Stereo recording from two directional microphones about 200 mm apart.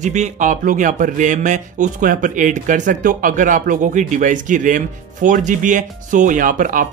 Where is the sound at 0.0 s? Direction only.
35° right (ahead or behind).